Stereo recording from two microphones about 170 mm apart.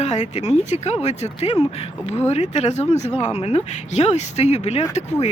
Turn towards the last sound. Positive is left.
turn(degrees=40)  # may be behind; listen again after turning